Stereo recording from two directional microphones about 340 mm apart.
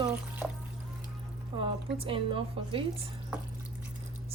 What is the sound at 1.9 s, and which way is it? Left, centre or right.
Speech, centre.